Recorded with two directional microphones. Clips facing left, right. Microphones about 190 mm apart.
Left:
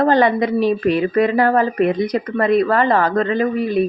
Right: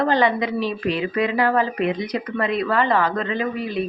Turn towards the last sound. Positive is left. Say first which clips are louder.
# left 7 dB
turn(degrees=50)  # may be behind; listen again after turning